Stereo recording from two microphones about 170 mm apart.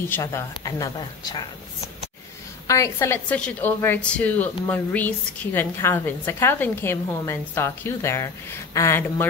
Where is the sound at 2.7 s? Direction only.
15° left (ahead or behind).